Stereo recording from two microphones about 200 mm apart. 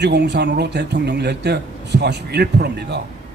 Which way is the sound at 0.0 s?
60° right (ahead or behind).